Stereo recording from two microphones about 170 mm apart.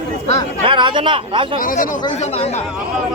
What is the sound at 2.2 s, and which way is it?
Speech, 40° left (ahead or behind).